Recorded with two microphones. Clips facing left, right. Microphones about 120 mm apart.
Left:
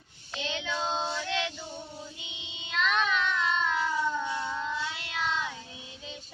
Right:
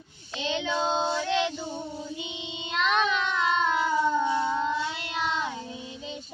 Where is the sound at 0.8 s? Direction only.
65° right (ahead or behind).